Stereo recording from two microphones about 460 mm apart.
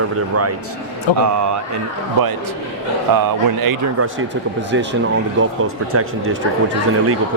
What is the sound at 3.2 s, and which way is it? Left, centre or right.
Speech, right.